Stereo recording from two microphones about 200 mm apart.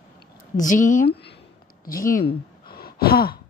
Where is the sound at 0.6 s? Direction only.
40° left (ahead or behind).